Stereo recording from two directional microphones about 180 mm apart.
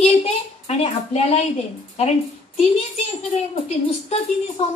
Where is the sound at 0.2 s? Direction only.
35° left (ahead or behind).